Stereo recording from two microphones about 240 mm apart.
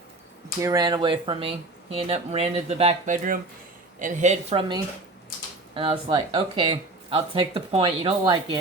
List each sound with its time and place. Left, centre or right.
0.6 s speech: centre